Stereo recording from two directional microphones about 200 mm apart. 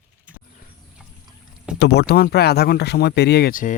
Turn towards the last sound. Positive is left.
turn(degrees=50)  # may be behind; listen again after turning